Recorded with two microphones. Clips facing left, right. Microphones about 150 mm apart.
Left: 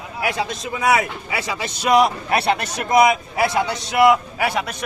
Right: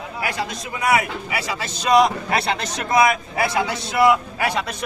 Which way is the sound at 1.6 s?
5° left (ahead or behind).